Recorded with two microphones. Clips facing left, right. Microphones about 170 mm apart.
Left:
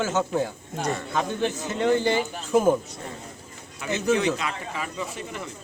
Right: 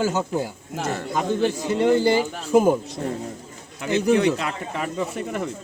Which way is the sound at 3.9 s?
60° right (ahead or behind).